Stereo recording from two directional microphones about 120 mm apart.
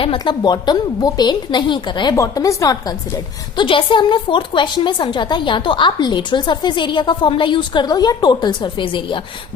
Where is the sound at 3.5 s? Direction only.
45° left (ahead or behind).